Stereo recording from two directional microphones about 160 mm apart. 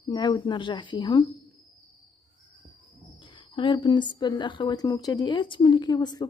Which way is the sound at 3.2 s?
30° left (ahead or behind).